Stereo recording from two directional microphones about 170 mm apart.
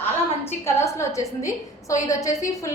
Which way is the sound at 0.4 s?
15° left (ahead or behind).